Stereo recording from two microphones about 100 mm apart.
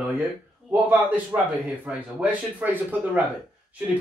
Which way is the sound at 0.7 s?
15° right (ahead or behind).